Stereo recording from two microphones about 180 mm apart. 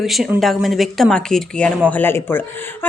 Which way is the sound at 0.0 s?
Centre (ahead or behind).